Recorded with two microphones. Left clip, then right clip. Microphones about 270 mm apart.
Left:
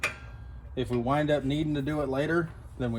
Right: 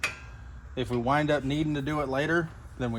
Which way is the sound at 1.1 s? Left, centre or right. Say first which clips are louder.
Right 1 dB; right.